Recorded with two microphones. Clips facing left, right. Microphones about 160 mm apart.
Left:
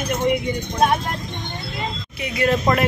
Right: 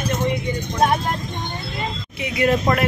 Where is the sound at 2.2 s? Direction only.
15° right (ahead or behind).